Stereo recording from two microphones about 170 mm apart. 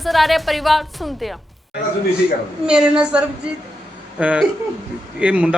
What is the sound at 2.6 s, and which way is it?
A woman's voice, 5° right (ahead or behind).